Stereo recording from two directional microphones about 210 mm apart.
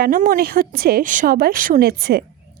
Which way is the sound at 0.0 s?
40° right (ahead or behind).